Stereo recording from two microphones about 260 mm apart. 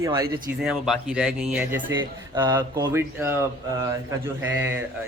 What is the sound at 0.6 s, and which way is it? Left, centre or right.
A man's voice, centre.